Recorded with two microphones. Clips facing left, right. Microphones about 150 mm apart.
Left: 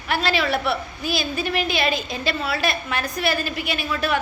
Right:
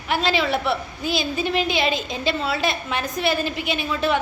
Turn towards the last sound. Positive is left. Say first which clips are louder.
# right 2 dB
turn(degrees=-20)  # may be behind; listen again after turning